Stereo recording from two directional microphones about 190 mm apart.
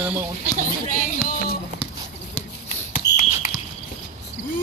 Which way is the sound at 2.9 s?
45° left (ahead or behind).